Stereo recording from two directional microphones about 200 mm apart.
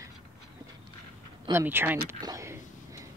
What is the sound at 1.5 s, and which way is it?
Speech, 10° right (ahead or behind).